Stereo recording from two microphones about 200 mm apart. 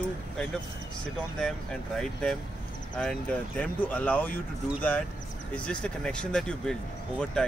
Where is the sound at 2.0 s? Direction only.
5° left (ahead or behind).